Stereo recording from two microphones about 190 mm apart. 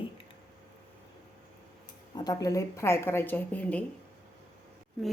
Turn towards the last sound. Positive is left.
turn(degrees=0)  # may be behind; listen again after turning